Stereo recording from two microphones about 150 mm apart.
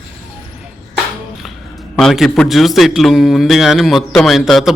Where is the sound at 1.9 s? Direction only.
Centre (ahead or behind).